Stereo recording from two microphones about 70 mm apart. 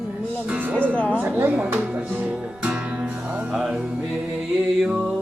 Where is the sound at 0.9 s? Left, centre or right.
Centre.